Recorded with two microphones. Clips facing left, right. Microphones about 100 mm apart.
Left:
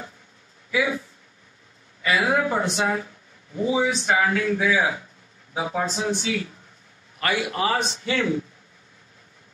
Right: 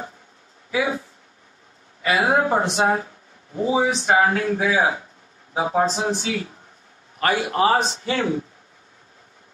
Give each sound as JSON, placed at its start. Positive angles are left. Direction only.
{"t": 0.7, "sound": "speech", "side_deg": -35}